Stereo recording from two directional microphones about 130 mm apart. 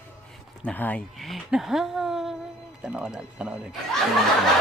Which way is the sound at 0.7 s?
10° left (ahead or behind).